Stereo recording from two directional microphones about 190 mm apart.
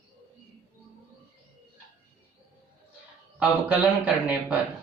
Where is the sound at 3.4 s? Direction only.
5° right (ahead or behind).